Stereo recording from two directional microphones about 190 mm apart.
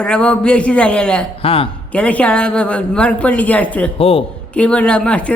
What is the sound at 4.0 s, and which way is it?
Speech, 30° left (ahead or behind).